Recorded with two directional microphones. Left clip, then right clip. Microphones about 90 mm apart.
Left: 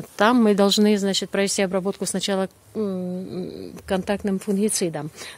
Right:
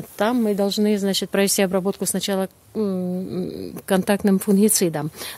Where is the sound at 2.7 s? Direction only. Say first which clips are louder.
Right 3 dB; 20° right (ahead or behind).